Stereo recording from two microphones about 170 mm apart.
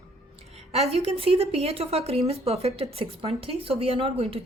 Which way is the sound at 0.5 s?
40° right (ahead or behind).